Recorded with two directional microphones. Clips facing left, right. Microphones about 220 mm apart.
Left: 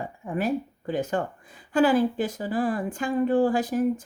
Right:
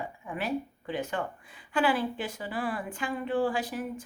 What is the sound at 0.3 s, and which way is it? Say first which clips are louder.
A woman's voice: left 6 dB; 45° left (ahead or behind).